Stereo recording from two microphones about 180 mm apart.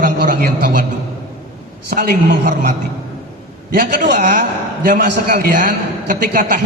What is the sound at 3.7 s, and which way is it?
A woman's voice, 50° right (ahead or behind).